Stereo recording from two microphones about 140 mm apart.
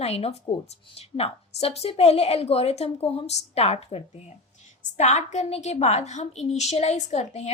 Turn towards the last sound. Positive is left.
turn(degrees=50)  # may be behind; listen again after turning